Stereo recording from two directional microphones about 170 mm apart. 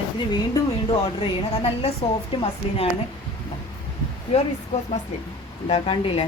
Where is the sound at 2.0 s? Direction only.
35° left (ahead or behind).